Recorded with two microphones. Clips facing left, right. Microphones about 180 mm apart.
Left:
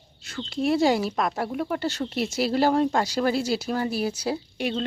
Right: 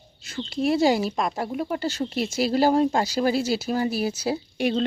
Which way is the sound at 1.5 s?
10° right (ahead or behind).